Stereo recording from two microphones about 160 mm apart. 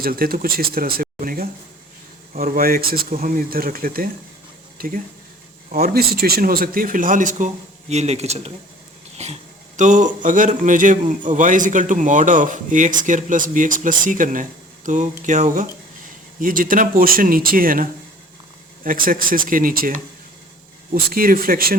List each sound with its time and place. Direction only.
0.0 s a man's voice: 65° right (ahead or behind); by 8.5 s 40° right (ahead or behind)
9.1 s dog: 45° right (ahead or behind)
10.2 s a man's voice: 55° right (ahead or behind)